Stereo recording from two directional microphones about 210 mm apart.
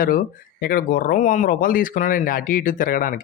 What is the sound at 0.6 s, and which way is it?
Speech, 45° left (ahead or behind).